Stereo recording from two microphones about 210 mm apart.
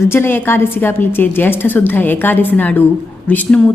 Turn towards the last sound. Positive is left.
turn(degrees=5)  # may be behind; listen again after turning